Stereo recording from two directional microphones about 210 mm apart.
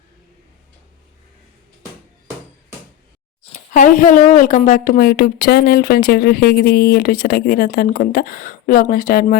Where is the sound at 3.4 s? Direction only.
35° left (ahead or behind).